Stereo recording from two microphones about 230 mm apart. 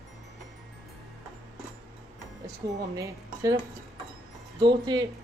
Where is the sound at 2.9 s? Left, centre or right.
Centre.